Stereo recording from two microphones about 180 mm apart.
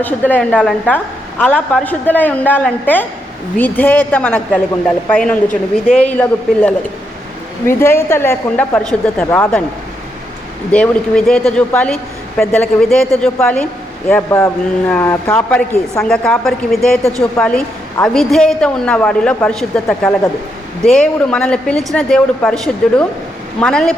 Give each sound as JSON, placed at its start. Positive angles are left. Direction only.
{"t": 0.0, "sound": "a woman's voice", "side_deg": 10}
{"t": 10.7, "sound": "a woman's voice", "side_deg": 5}